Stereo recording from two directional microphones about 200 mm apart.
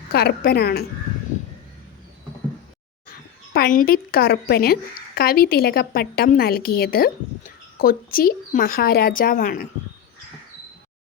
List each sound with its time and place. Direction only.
0.1 s a woman's voice: 50° left (ahead or behind)
3.5 s a woman's voice: 45° left (ahead or behind)